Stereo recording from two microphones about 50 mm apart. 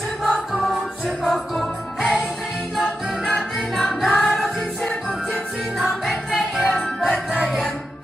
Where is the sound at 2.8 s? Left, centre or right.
Centre.